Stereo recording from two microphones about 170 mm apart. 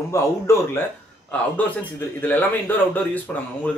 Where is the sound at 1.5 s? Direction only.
10° left (ahead or behind).